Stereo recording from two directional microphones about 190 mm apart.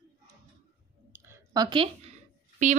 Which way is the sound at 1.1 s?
15° right (ahead or behind).